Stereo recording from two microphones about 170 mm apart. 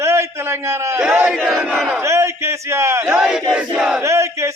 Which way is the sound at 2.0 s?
15° right (ahead or behind).